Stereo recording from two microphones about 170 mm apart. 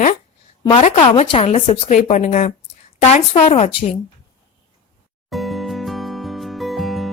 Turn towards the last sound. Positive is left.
turn(degrees=0)  # may be behind; listen again after turning